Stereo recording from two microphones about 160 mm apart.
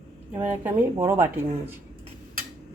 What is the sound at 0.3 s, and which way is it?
Speech, 10° right (ahead or behind).